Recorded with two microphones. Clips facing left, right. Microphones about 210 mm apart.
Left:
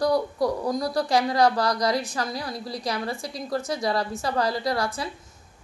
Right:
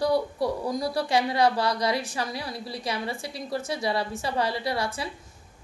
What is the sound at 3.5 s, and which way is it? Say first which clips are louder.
Speech: left 3 dB; 25° right (ahead or behind).